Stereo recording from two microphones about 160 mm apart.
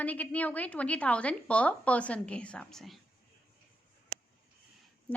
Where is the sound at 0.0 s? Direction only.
10° left (ahead or behind).